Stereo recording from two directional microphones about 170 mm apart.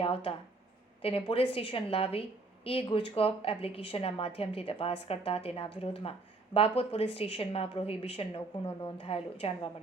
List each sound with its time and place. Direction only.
0.0 s speech: 35° left (ahead or behind)